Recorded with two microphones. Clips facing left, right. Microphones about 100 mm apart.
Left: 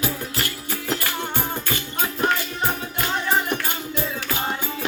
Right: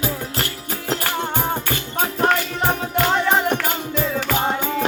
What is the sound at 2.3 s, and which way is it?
Music, 70° right (ahead or behind).